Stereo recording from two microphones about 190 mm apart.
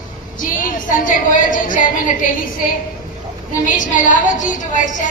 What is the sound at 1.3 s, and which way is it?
A woman's voice, 45° left (ahead or behind).